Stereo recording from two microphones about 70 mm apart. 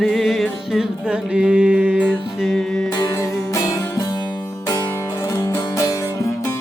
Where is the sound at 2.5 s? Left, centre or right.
Centre.